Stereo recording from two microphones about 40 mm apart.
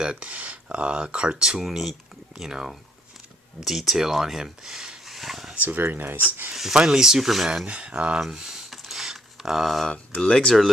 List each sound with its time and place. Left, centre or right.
0.0 s speech: right
1.5 s speech: centre
5.0 s a sound: centre
5.5 s speech: right
6.5 s speech: centre
7.7 s speech: right
8.2 s a sound: centre
10.2 s speech: left